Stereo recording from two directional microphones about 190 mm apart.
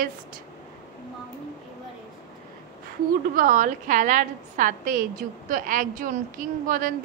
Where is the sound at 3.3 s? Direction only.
45° right (ahead or behind).